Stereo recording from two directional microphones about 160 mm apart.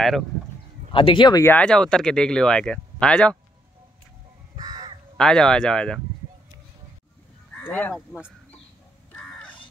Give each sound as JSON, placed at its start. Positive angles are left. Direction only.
{"t": 0.9, "sound": "speech", "side_deg": 30}
{"t": 1.4, "sound": "speech", "side_deg": 10}
{"t": 4.6, "sound": "crow", "side_deg": -25}
{"t": 5.1, "sound": "speech", "side_deg": 5}
{"t": 7.5, "sound": "honk", "side_deg": 10}
{"t": 7.9, "sound": "speech", "side_deg": -5}
{"t": 9.1, "sound": "crow", "side_deg": 5}